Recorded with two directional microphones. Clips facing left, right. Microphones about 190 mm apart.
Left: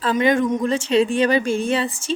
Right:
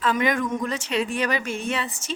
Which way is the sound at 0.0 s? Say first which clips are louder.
Left 5 dB; 30° left (ahead or behind).